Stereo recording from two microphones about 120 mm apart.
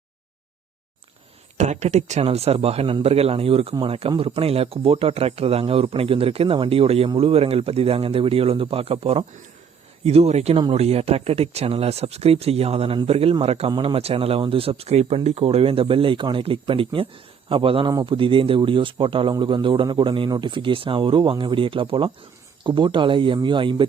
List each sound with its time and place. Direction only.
1.5 s speech: 75° right (ahead or behind); by 13.7 s 55° right (ahead or behind)
13.7 s speech: 45° right (ahead or behind)